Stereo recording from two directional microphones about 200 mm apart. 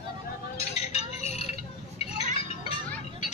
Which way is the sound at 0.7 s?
30° left (ahead or behind).